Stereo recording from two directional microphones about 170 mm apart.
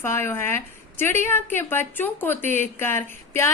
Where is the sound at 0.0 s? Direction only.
15° left (ahead or behind).